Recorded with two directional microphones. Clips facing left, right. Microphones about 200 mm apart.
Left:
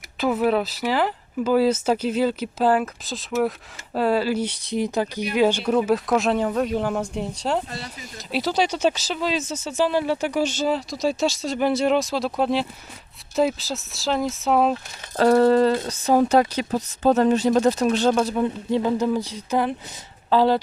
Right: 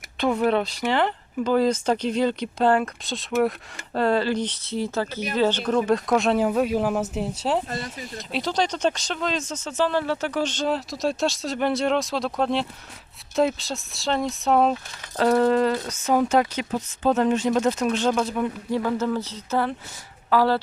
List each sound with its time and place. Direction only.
0.2 s speech: 5° left (ahead or behind)
7.7 s speech: 45° right (ahead or behind)
8.3 s speech: 5° left (ahead or behind)
15.1 s speech: 40° left (ahead or behind); by 20.6 s 20° left (ahead or behind)